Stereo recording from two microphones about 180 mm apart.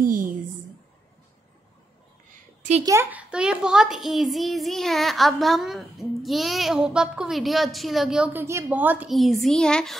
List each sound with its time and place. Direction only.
0.0 s a woman's voice: 50° right (ahead or behind)
2.8 s a child's voice: 15° right (ahead or behind); by 9.9 s 5° left (ahead or behind)